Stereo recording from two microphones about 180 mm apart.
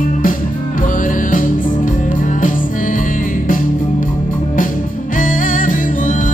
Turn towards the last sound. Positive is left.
turn(degrees=50)  # may be behind; listen again after turning